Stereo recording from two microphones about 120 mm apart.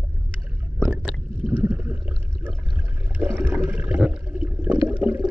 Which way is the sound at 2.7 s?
15° right (ahead or behind).